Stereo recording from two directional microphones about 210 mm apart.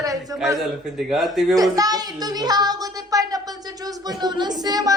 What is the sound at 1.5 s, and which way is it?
A man's voice, 15° right (ahead or behind).